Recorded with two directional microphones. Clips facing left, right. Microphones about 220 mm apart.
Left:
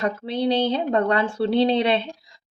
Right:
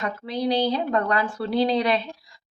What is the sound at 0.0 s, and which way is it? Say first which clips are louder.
A woman's voice: left 3 dB; 30° left (ahead or behind).